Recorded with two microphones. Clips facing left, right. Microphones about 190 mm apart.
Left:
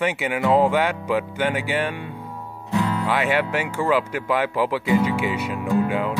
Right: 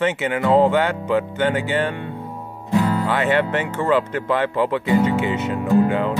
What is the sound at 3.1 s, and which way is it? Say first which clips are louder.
Speech: right 1 dB; 10° left (ahead or behind).